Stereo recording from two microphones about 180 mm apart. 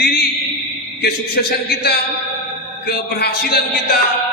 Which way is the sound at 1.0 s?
60° left (ahead or behind).